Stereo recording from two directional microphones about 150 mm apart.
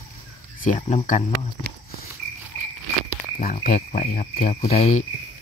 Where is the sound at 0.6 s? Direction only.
60° left (ahead or behind).